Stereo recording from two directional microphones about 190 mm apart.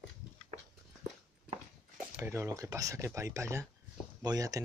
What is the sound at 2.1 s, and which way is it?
Speech, 10° right (ahead or behind).